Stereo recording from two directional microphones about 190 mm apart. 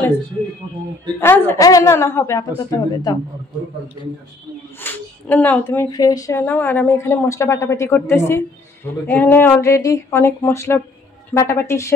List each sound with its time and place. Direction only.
1.2 s a woman's voice: 10° left (ahead or behind)
4.8 s a woman's voice: 10° left (ahead or behind)